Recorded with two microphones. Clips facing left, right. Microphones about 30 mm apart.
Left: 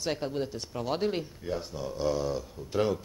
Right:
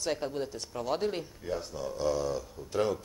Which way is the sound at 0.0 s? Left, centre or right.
Centre.